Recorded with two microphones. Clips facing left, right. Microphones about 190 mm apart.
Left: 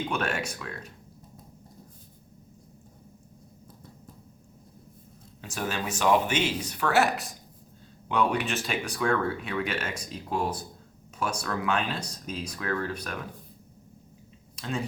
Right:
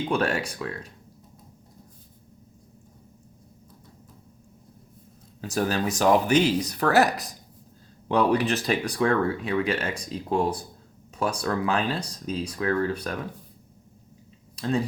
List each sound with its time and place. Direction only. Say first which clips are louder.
0.1 s speech: right 5 dB; 35° right (ahead or behind)
5.4 s speech: right 7 dB; 35° right (ahead or behind)
14.5 s speech: right 7 dB; 35° right (ahead or behind)